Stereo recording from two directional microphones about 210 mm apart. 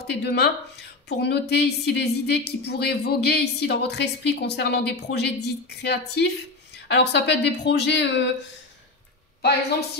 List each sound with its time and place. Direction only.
0.0 s speech: 55° left (ahead or behind)